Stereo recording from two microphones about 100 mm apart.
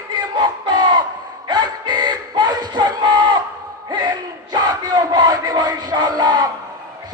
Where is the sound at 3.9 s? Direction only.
45° right (ahead or behind).